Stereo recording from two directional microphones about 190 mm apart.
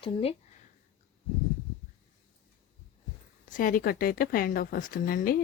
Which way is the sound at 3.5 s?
45° left (ahead or behind).